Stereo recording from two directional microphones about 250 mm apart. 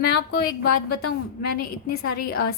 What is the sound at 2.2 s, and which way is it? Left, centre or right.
Speech, left.